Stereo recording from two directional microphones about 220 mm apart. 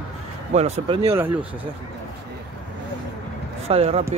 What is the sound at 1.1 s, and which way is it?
Speech, 10° right (ahead or behind).